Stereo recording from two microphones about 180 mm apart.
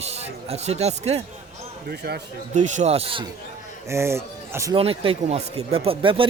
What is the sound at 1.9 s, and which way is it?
Speech, 60° right (ahead or behind).